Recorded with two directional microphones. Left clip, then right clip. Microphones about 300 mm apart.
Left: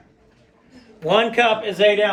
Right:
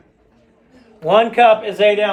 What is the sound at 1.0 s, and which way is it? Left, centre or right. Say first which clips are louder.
A man's voice: right 5 dB; centre.